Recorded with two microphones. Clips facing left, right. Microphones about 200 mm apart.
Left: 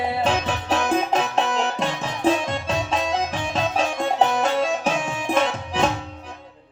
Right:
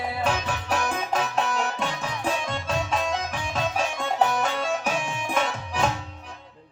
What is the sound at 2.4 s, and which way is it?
Music, 40° left (ahead or behind).